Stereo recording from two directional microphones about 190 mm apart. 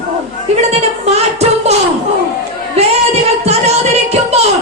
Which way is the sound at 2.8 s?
35° right (ahead or behind).